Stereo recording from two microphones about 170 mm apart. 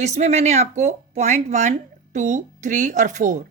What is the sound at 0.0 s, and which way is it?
Speech, 40° right (ahead or behind).